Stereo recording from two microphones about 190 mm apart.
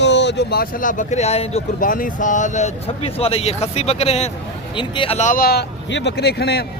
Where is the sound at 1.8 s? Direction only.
45° left (ahead or behind).